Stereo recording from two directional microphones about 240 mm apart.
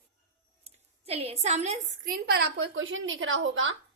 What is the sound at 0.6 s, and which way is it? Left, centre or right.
A woman's voice, right.